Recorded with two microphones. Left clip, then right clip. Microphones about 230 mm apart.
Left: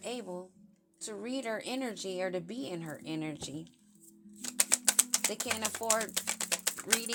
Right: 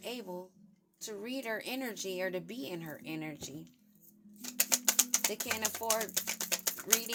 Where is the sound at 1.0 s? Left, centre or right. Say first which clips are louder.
Left 2 dB; centre.